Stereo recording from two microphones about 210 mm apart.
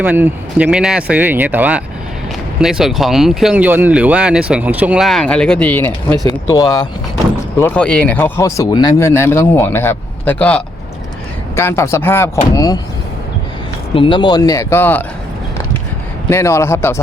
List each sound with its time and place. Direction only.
0.0 s speech: 10° right (ahead or behind); by 6.8 s 15° left (ahead or behind)
7.6 s speech: 5° left (ahead or behind)
13.9 s speech: 25° left (ahead or behind)
16.3 s speech: 15° left (ahead or behind)